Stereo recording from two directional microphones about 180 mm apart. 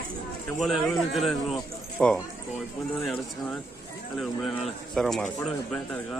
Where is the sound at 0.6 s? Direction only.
Centre (ahead or behind).